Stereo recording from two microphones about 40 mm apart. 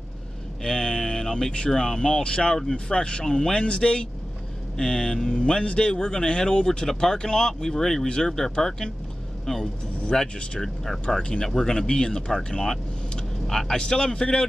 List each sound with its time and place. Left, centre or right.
0.7 s a sound: left
1.7 s speech: centre
10.6 s speech: centre